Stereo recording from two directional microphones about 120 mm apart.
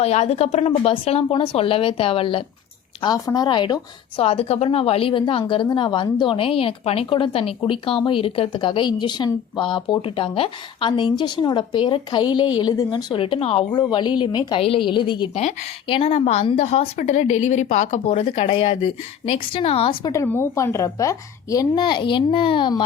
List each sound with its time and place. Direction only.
0.0 s speech: 65° left (ahead or behind); by 2.4 s 50° left (ahead or behind)
3.2 s a woman's voice: 35° left (ahead or behind)
4.2 s a woman's voice: 55° left (ahead or behind)
13.7 s a woman's voice: 40° left (ahead or behind)
15.4 s a woman's voice: 65° left (ahead or behind)
15.9 s a woman's voice: 50° left (ahead or behind); by 18.0 s 85° left
18.0 s a woman's voice: 55° left (ahead or behind)
18.5 s speech: 45° left (ahead or behind)
20.1 s a woman's voice: 20° left (ahead or behind)
21.8 s a woman's voice: 40° left (ahead or behind)